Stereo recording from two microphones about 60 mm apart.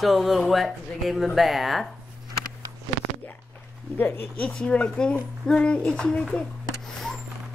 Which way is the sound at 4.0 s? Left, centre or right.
Left.